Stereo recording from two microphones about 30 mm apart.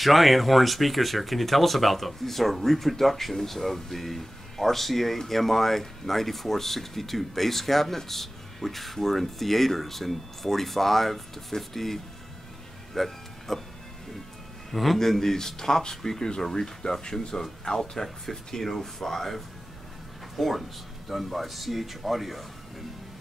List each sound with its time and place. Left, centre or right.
0.0 s speech: centre
12.9 s music: centre
14.7 s a man's voice: centre
15.0 s speech: centre